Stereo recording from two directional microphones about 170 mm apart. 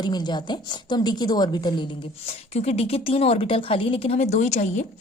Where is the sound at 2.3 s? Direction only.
40° left (ahead or behind).